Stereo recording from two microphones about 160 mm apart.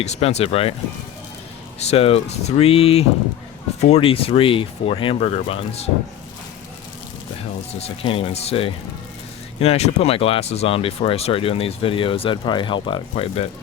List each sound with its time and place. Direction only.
0.0 s speech: 40° left (ahead or behind)
1.9 s speech: 40° left (ahead or behind)
7.7 s speech: 40° left (ahead or behind)